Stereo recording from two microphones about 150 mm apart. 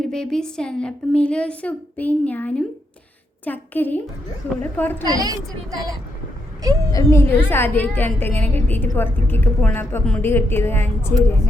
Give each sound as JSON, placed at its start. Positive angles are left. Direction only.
{"t": 0.1, "sound": "a woman's voice", "side_deg": 5}
{"t": 5.0, "sound": "a woman's voice", "side_deg": -25}
{"t": 6.9, "sound": "a woman's voice", "side_deg": 20}
{"t": 8.3, "sound": "a woman's voice", "side_deg": -50}
{"t": 8.5, "sound": "a woman's voice", "side_deg": 15}